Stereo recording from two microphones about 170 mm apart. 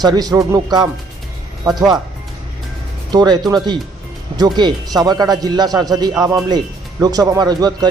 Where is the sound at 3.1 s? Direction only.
25° right (ahead or behind).